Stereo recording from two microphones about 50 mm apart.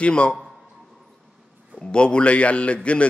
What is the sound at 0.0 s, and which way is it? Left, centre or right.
Speech, left.